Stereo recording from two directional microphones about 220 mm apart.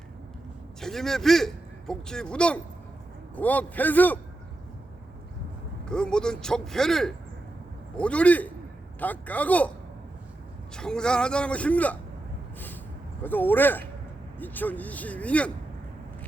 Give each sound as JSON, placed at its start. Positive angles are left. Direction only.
{"t": 0.8, "sound": "a man's voice", "side_deg": 0}
{"t": 5.8, "sound": "a man's voice", "side_deg": 5}
{"t": 10.8, "sound": "a man's voice", "side_deg": 5}
{"t": 13.2, "sound": "speech", "side_deg": 10}